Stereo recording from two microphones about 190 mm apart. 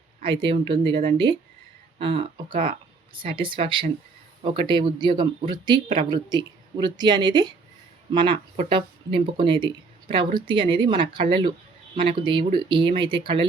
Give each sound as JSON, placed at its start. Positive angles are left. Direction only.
{"t": 0.2, "sound": "speech", "side_deg": -25}